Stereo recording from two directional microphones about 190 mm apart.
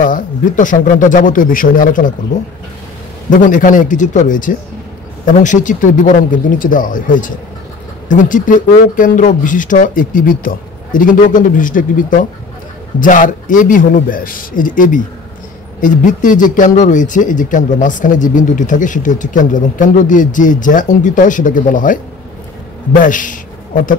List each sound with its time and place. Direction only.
0.0 s a man's voice: 45° left (ahead or behind)
3.3 s a man's voice: 45° left (ahead or behind)
23.0 s a man's voice: 45° left (ahead or behind)